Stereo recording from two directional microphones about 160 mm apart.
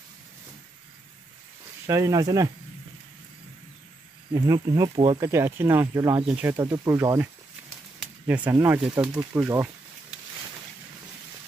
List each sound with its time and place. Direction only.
1.9 s speech: 20° right (ahead or behind)
4.3 s speech: 25° right (ahead or behind)
5.2 s speech: 15° right (ahead or behind)